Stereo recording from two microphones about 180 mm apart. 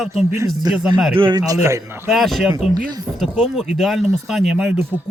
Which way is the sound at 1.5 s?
15° right (ahead or behind).